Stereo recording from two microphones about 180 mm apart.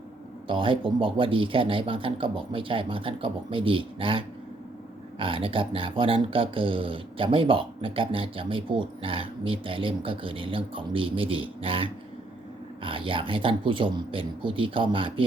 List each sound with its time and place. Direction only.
0.4 s speech: 30° right (ahead or behind)